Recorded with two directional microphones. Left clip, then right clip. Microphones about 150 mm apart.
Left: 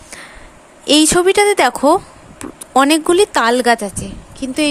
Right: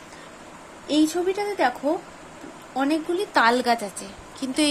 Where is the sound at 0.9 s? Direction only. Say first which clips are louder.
Left 11 dB; 85° left.